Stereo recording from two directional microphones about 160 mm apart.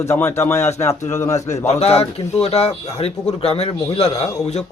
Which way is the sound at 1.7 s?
40° left (ahead or behind).